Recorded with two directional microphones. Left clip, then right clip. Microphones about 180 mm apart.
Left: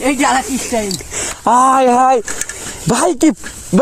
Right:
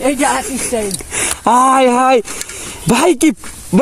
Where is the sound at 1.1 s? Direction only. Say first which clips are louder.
Right 3 dB; 45° right (ahead or behind).